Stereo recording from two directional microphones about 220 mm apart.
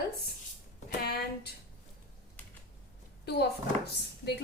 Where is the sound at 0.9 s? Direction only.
45° left (ahead or behind).